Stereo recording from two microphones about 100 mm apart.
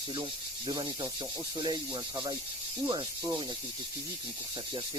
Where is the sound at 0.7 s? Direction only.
45° right (ahead or behind).